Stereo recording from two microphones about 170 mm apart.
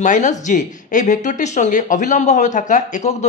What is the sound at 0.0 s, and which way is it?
Speech, 45° left (ahead or behind).